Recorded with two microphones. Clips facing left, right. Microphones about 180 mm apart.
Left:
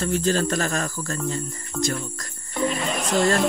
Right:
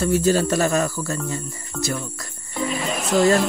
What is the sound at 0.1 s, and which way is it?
Speech, 10° right (ahead or behind).